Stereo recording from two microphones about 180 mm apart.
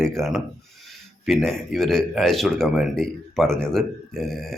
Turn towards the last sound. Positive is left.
turn(degrees=0)  # may be behind; listen again after turning